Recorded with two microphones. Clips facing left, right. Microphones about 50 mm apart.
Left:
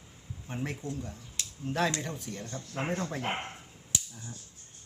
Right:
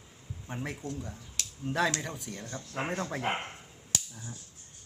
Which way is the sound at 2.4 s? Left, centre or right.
Centre.